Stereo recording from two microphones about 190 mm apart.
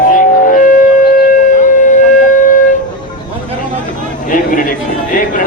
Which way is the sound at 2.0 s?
40° left (ahead or behind).